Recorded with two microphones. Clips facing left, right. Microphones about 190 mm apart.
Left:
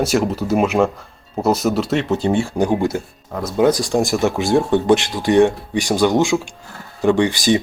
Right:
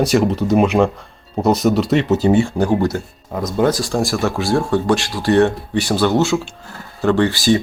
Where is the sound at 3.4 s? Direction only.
5° left (ahead or behind).